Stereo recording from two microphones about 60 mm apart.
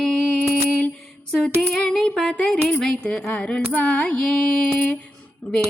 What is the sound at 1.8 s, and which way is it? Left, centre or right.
Music, centre.